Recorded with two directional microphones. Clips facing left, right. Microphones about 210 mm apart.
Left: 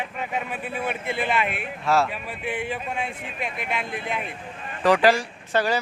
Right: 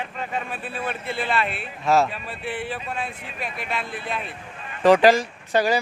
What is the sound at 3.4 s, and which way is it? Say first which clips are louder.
Speech: even; 20° left (ahead or behind).